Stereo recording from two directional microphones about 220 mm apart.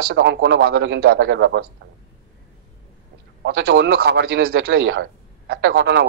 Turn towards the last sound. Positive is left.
turn(degrees=-55)  # may be behind; listen again after turning